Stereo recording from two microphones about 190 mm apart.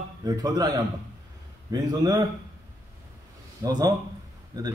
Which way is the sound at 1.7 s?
20° right (ahead or behind).